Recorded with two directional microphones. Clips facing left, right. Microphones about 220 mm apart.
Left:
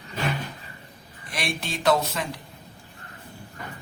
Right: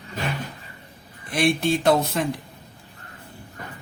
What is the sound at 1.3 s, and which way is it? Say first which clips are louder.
Speech: right 10 dB; 55° right (ahead or behind).